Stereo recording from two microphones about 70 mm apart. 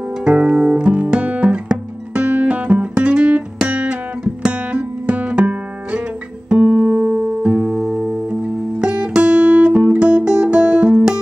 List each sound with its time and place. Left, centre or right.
0.2 s music: centre